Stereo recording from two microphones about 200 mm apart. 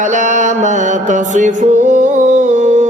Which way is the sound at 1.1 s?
40° right (ahead or behind).